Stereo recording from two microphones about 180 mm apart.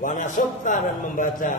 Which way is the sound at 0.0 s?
45° left (ahead or behind).